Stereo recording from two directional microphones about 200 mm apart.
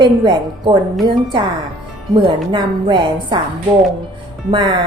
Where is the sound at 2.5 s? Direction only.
20° right (ahead or behind).